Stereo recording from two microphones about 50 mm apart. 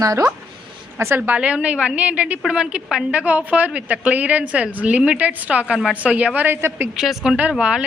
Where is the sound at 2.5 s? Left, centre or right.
Centre.